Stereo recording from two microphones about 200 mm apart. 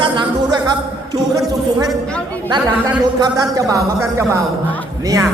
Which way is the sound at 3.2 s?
15° right (ahead or behind).